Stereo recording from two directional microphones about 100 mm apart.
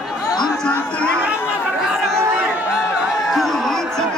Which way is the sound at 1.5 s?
5° right (ahead or behind).